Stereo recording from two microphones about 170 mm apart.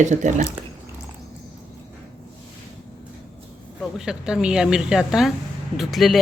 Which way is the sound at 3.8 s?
5° right (ahead or behind).